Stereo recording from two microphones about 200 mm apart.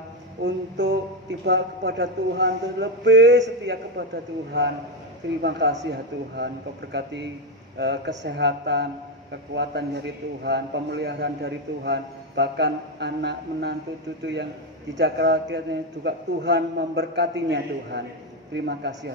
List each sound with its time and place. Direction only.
0.4 s a man's voice: 60° right (ahead or behind)
5.4 s a man's voice: 60° right (ahead or behind)